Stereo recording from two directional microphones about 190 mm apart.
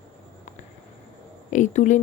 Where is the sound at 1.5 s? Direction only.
40° left (ahead or behind).